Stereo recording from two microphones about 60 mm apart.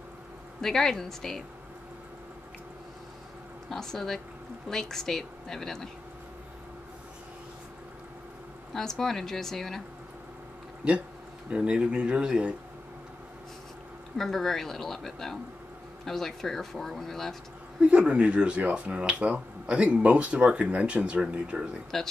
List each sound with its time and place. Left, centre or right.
0.6 s speech: centre
3.7 s speech: centre
8.7 s speech: centre
11.5 s speech: centre
14.1 s speech: centre
17.7 s speech: centre
21.9 s speech: centre